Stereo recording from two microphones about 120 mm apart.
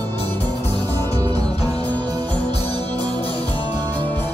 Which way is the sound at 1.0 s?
20° left (ahead or behind).